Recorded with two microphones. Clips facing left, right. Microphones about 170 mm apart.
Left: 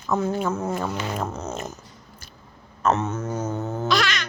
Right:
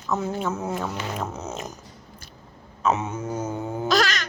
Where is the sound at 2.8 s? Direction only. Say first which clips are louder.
Left 2 dB; 10° right (ahead or behind).